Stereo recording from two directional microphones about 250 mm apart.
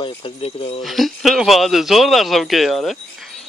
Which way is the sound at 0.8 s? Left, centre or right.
Centre.